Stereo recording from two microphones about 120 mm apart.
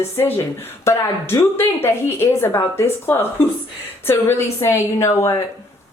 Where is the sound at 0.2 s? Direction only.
20° left (ahead or behind).